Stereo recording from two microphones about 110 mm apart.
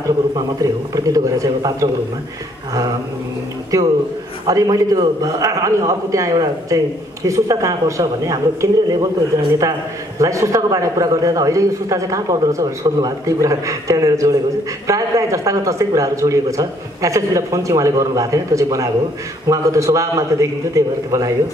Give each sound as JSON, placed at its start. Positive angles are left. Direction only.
{"t": 0.6, "sound": "a man's voice", "side_deg": -30}
{"t": 3.7, "sound": "a man's voice", "side_deg": -30}